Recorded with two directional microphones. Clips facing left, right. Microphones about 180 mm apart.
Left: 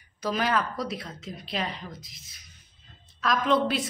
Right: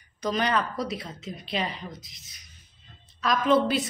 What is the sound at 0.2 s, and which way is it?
A woman's voice, 5° left (ahead or behind).